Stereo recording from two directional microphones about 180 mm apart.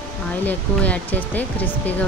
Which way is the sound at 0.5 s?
10° left (ahead or behind).